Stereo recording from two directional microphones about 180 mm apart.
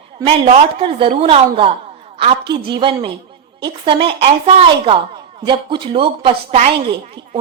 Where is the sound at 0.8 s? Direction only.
30° right (ahead or behind).